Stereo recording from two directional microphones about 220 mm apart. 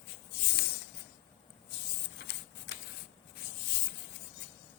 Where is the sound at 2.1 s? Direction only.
50° left (ahead or behind).